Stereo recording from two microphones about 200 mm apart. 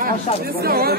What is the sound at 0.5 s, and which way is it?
Speech, 50° right (ahead or behind).